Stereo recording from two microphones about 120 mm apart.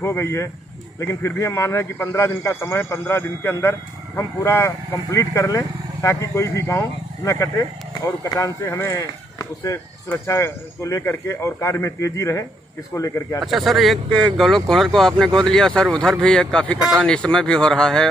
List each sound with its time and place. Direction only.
0.0 s speech: 25° left (ahead or behind)
13.4 s speech: centre (ahead or behind)